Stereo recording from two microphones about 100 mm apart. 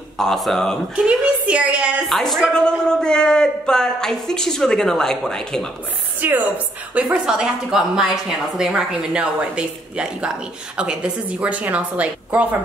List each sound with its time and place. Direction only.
0.2 s a man's voice: 5° left (ahead or behind)
0.9 s a woman's voice: 10° right (ahead or behind)
2.0 s a man's voice: 5° left (ahead or behind)
6.2 s a woman's voice: 15° right (ahead or behind)